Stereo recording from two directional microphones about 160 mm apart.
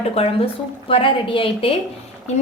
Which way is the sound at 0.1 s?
40° left (ahead or behind).